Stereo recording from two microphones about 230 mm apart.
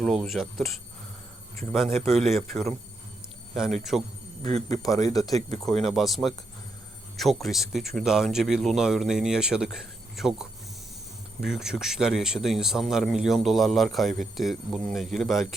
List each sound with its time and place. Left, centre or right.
0.0 s speech: centre
2.1 s speech: centre
4.7 s speech: centre
5.6 s speech: centre
7.4 s speech: centre
11.4 s speech: centre